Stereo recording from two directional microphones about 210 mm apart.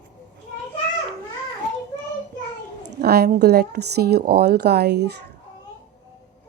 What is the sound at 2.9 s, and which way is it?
A woman's voice, 50° right (ahead or behind).